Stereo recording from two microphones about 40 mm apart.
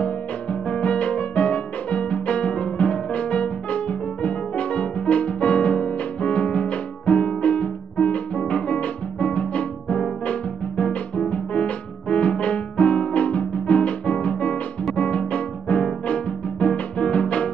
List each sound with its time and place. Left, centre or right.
0.0 s music: left